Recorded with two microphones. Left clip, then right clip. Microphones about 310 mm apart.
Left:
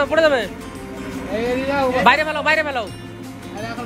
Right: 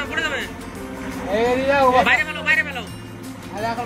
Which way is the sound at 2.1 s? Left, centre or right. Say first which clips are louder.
Left 3 dB; centre.